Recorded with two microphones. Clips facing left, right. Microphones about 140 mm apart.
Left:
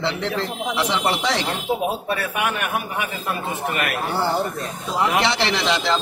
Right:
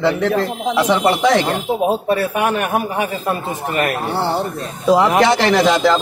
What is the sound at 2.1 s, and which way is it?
A man's voice, 35° right (ahead or behind).